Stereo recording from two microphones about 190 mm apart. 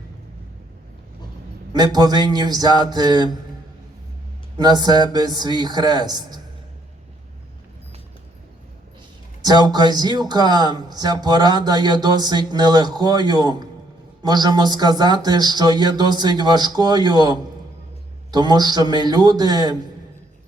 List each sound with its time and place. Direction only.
1.7 s speech: 20° right (ahead or behind)
4.5 s speech: 20° right (ahead or behind)
9.4 s speech: 20° right (ahead or behind)